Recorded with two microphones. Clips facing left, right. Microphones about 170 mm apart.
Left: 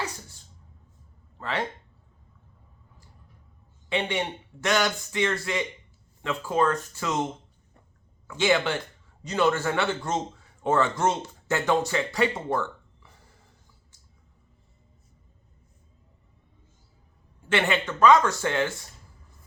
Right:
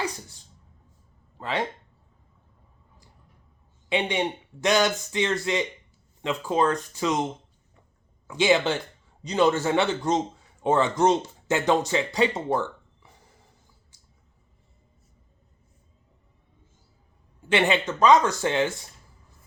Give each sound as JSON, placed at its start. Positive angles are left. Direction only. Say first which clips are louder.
{"t": 1.4, "sound": "speech", "louder": "right 2 dB", "side_deg": -15}
{"t": 3.8, "sound": "a man's voice", "louder": "right 2 dB", "side_deg": -15}
{"t": 8.3, "sound": "speech", "louder": "right 2 dB", "side_deg": -15}
{"t": 17.5, "sound": "speech", "louder": "right 3 dB", "side_deg": -20}